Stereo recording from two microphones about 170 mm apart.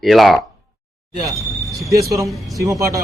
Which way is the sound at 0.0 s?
Centre (ahead or behind).